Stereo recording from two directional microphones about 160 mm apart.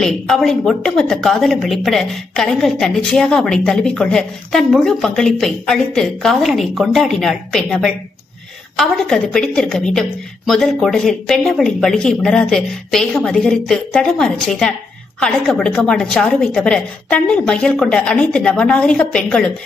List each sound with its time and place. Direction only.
0.0 s a woman's voice: 5° left (ahead or behind)